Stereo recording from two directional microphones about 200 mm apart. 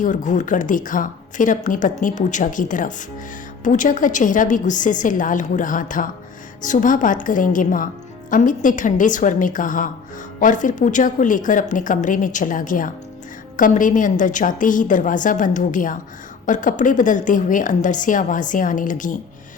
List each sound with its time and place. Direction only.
0.0 s speech: 40° left (ahead or behind)